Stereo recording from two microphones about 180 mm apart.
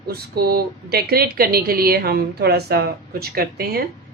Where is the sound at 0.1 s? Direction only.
60° right (ahead or behind).